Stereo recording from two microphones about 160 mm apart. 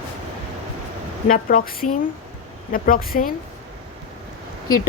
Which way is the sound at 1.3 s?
60° left (ahead or behind).